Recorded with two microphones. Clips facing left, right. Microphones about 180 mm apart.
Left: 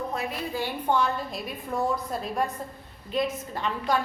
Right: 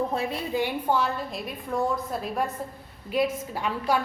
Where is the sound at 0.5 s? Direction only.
20° right (ahead or behind).